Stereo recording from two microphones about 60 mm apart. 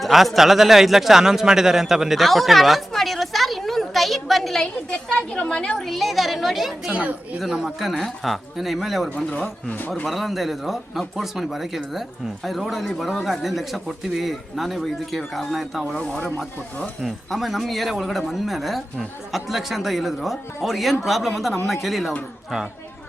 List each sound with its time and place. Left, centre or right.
0.0 s a sound: centre
5.7 s a man's voice: centre
6.9 s speech: right
7.3 s a man's voice: centre
9.1 s speech: left
10.1 s a man's voice: centre
16.0 s speech: centre
17.0 s a man's voice: centre